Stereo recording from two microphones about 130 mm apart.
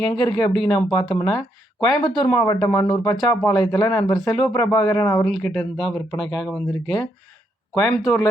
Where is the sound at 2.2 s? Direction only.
15° left (ahead or behind).